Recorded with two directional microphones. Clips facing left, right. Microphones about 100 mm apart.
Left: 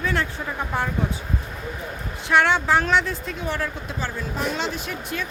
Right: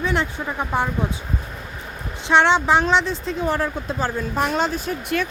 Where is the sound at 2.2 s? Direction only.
25° right (ahead or behind).